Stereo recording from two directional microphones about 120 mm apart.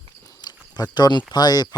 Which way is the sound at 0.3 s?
35° left (ahead or behind).